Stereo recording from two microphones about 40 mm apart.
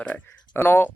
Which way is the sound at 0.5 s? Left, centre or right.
Left.